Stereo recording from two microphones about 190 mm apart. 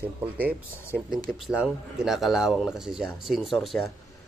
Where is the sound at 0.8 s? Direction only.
15° left (ahead or behind).